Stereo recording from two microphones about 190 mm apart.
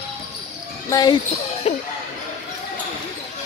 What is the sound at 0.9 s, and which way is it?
Speech, 20° left (ahead or behind).